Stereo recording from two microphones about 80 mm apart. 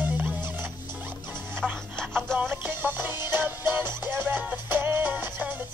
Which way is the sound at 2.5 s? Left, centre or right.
Right.